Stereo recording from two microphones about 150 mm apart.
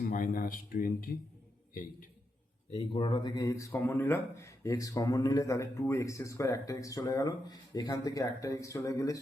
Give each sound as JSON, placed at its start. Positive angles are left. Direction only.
{"t": 0.0, "sound": "a man's voice", "side_deg": 70}
{"t": 2.9, "sound": "speech", "side_deg": 35}